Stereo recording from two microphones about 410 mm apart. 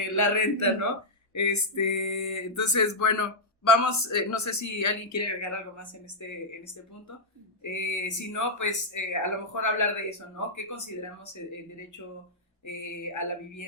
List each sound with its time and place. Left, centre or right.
0.2 s speech: left
7.6 s speech: left
12.6 s speech: left